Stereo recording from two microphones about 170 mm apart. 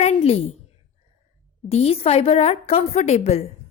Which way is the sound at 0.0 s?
40° left (ahead or behind).